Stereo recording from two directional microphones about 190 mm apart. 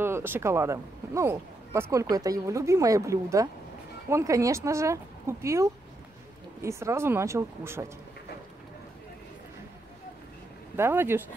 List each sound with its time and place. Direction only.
0.0 s speech: 10° right (ahead or behind)
10.8 s speech: 10° right (ahead or behind)